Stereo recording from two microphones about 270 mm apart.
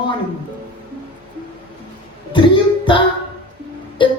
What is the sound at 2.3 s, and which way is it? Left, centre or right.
Music, centre.